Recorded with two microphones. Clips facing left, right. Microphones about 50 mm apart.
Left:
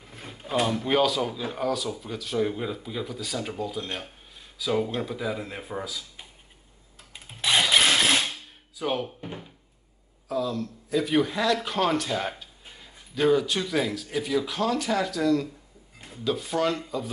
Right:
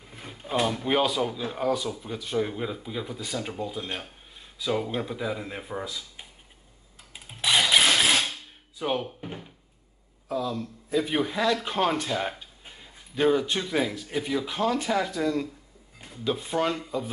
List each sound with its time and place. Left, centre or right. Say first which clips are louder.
0.0 s speech: even; centre
7.2 s a sound: even; centre
8.7 s speech: even; centre
10.3 s speech: left 1 dB; centre
12.6 s a sound: even; centre
13.1 s speech: left 1 dB; centre